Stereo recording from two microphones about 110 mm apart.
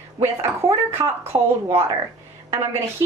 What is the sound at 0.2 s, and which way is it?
Speech, 25° right (ahead or behind).